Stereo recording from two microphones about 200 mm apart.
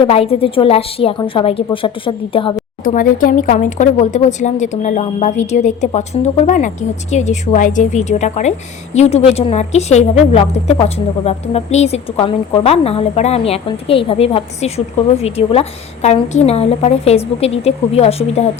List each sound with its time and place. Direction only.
0.0 s a woman's voice: 30° left (ahead or behind)
2.8 s speech: 45° left (ahead or behind)